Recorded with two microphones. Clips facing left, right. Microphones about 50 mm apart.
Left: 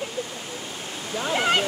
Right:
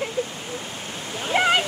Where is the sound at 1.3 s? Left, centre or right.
Right.